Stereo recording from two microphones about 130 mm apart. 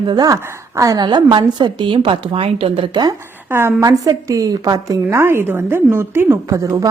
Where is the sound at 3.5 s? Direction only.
20° right (ahead or behind).